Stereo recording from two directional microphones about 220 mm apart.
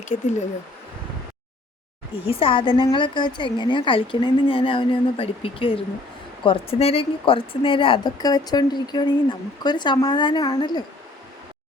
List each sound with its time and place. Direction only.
0.1 s speech: 35° left (ahead or behind)
2.2 s speech: 25° left (ahead or behind)